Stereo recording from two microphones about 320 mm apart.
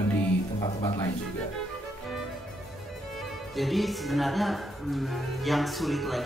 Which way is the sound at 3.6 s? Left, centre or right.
Centre.